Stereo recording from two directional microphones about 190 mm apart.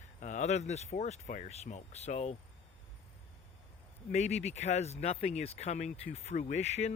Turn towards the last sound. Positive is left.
turn(degrees=35)  # may be behind; listen again after turning